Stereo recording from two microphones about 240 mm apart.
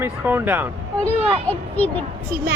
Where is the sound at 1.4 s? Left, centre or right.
Centre.